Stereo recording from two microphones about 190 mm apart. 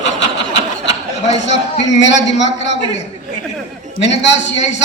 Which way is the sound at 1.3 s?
70° left (ahead or behind).